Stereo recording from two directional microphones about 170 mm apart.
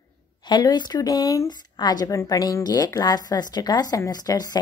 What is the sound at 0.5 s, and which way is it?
A woman's voice, 25° left (ahead or behind).